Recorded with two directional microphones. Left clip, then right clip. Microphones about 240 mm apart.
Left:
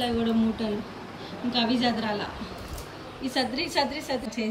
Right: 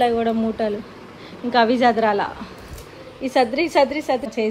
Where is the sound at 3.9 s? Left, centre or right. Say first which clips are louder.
Right 9 dB; centre.